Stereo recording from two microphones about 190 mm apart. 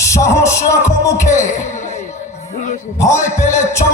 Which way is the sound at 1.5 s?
40° left (ahead or behind).